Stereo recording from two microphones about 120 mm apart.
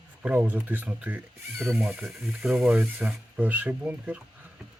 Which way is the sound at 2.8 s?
15° right (ahead or behind).